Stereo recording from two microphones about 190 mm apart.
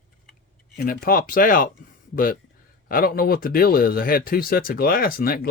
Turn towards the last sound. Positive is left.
turn(degrees=50)  # may be behind; listen again after turning